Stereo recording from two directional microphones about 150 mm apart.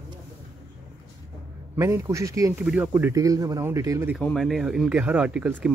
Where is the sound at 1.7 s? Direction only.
20° right (ahead or behind).